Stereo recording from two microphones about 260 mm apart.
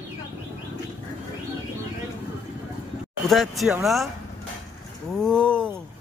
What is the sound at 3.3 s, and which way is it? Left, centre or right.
Speech, centre.